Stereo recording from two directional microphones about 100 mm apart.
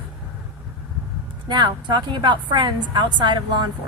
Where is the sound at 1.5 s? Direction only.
50° right (ahead or behind).